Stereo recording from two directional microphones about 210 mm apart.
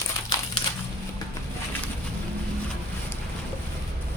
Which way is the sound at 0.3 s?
20° left (ahead or behind).